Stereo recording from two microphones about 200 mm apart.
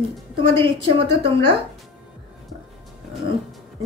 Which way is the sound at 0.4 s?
25° right (ahead or behind).